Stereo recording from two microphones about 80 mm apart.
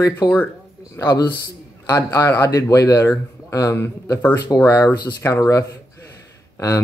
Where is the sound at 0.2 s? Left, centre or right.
Left.